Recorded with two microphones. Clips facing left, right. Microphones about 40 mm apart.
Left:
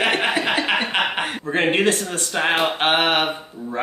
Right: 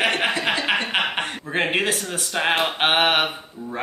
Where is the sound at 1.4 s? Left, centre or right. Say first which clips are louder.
Left 4 dB; centre.